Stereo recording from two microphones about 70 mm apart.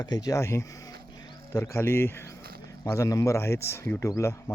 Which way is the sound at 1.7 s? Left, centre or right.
Left.